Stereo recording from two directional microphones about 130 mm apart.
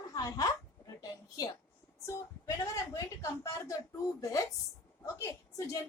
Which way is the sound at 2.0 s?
20° left (ahead or behind).